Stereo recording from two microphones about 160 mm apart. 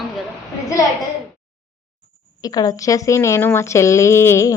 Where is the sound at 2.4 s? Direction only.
25° left (ahead or behind).